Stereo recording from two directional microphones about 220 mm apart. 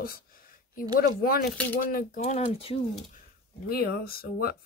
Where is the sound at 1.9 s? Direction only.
35° left (ahead or behind).